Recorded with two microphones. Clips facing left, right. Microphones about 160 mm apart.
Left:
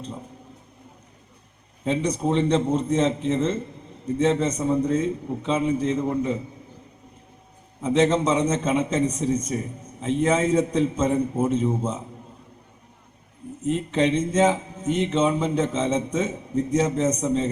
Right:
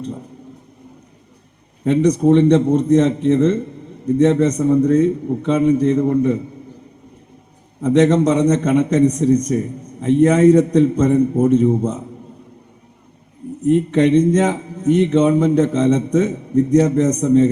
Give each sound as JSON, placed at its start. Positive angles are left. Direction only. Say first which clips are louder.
{"t": 1.9, "sound": "a man's voice", "louder": "right 10 dB", "side_deg": -65}
{"t": 7.8, "sound": "a man's voice", "louder": "right 7 dB", "side_deg": -65}
{"t": 14.1, "sound": "speech", "louder": "right 11 dB", "side_deg": -35}
{"t": 14.4, "sound": "a man's voice", "louder": "right 4 dB", "side_deg": -65}